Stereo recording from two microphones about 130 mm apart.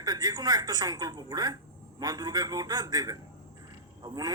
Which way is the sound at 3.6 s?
30° right (ahead or behind).